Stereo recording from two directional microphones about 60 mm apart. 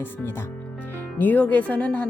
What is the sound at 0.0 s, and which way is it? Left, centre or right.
A woman's voice, left.